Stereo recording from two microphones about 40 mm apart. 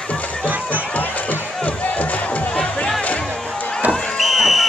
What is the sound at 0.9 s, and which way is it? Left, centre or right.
Crowd, left.